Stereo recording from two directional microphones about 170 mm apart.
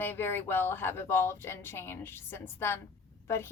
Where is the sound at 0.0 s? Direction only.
15° left (ahead or behind).